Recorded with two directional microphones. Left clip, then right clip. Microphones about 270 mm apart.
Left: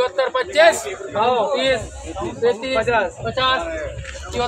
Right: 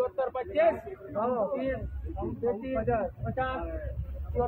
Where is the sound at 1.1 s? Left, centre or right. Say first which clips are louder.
Left 11 dB; left.